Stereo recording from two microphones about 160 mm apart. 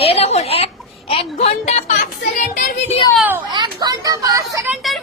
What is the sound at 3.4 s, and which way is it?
Speech, 25° right (ahead or behind).